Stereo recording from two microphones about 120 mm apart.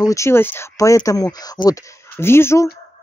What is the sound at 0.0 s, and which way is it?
Speech, 25° left (ahead or behind).